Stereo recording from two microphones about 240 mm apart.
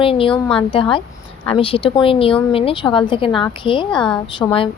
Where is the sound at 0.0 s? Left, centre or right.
Left.